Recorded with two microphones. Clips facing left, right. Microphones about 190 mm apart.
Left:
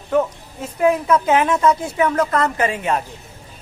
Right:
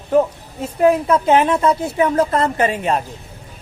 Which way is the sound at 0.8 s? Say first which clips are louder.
Right 2 dB; 30° right (ahead or behind).